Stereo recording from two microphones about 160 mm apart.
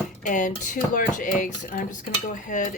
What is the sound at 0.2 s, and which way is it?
Speech, 55° left (ahead or behind).